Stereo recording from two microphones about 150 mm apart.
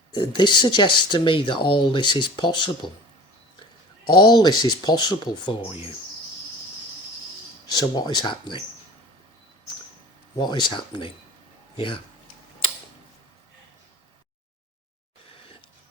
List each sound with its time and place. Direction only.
0.1 s speech: 30° left (ahead or behind)
4.0 s speech: 30° left (ahead or behind)
7.7 s speech: 25° left (ahead or behind)
10.3 s speech: 30° left (ahead or behind)